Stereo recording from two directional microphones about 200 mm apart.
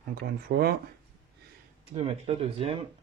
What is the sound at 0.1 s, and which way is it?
Speech, 50° right (ahead or behind).